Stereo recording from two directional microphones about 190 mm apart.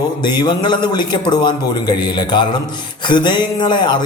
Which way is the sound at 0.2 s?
25° left (ahead or behind).